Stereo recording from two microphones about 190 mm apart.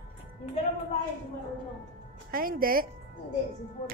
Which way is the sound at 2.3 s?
50° right (ahead or behind).